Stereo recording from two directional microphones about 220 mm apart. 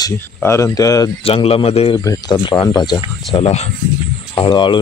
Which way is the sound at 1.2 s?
25° left (ahead or behind).